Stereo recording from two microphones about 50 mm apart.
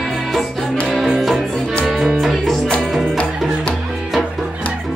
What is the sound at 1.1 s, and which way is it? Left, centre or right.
Music, centre.